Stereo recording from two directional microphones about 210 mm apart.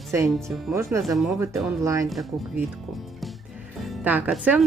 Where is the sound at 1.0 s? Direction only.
Centre (ahead or behind).